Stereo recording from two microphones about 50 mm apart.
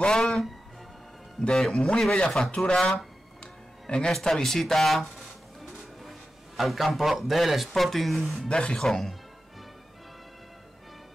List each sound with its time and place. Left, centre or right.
0.0 s speech: centre
1.4 s speech: centre
4.1 s a man's voice: centre
8.5 s speech: centre